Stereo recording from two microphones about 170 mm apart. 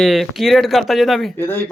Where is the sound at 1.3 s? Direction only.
15° left (ahead or behind).